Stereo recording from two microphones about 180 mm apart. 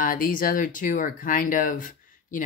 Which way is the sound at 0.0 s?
50° left (ahead or behind).